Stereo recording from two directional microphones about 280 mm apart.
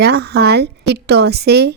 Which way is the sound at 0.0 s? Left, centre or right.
Right.